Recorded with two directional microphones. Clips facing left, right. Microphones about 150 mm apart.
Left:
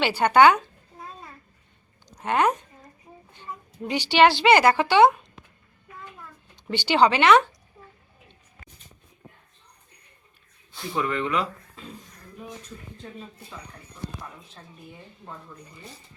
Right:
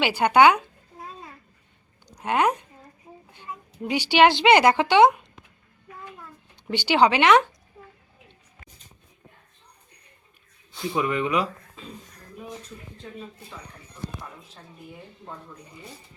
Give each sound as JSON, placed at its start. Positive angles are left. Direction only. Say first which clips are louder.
{"t": 0.0, "sound": "speech", "louder": "even", "side_deg": -10}
{"t": 2.0, "sound": "a woman's voice", "louder": "even", "side_deg": -10}
{"t": 6.7, "sound": "speech", "louder": "even", "side_deg": -10}
{"t": 10.9, "sound": "speech", "louder": "right 2 dB", "side_deg": -15}